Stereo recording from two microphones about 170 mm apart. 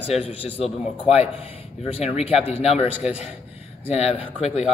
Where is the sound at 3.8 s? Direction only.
35° left (ahead or behind).